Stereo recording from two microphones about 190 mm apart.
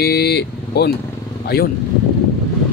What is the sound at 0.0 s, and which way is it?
Speech, 55° left (ahead or behind).